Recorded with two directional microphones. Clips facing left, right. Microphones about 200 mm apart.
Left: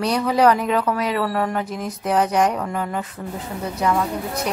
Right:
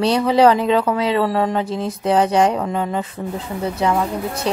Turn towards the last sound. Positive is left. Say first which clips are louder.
# right 2 dB
turn(degrees=-25)  # may be behind; listen again after turning